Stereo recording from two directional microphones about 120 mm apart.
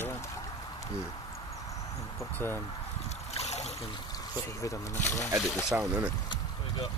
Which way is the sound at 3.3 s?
65° left (ahead or behind).